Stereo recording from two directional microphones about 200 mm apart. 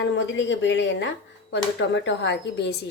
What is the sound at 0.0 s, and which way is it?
A woman's voice, 65° left (ahead or behind).